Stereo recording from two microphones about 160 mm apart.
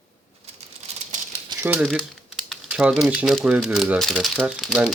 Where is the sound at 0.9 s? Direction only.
40° right (ahead or behind).